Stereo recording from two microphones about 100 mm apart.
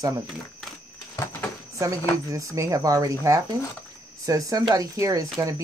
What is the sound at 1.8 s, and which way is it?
Speech, 35° right (ahead or behind).